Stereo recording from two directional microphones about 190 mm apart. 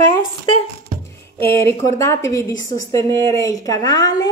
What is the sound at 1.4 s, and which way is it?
A woman's voice, 15° left (ahead or behind).